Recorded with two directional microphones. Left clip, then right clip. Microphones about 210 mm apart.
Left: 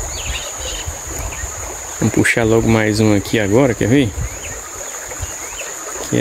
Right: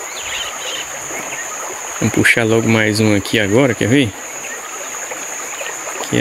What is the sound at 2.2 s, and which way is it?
Speech, 10° left (ahead or behind).